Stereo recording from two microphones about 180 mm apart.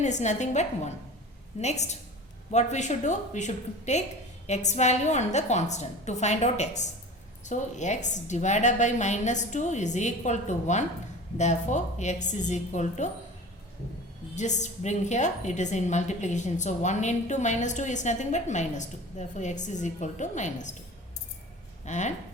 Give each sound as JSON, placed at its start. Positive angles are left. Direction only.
{"t": 0.0, "sound": "a woman's voice", "side_deg": 40}
{"t": 14.3, "sound": "a woman's voice", "side_deg": 40}
{"t": 21.8, "sound": "a woman's voice", "side_deg": 40}